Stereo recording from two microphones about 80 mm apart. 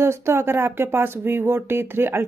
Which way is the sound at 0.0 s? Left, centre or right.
Right.